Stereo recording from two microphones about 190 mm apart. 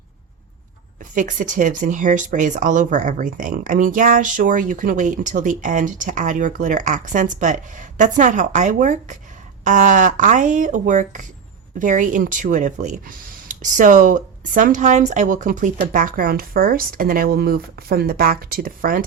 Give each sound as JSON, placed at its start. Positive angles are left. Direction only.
{"t": 1.1, "sound": "speech", "side_deg": -45}